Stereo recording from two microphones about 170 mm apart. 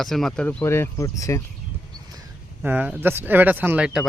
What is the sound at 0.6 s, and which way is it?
Speech, 15° left (ahead or behind).